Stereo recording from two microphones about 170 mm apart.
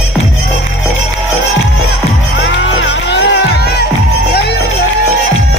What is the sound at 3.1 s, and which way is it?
Music, 90° left.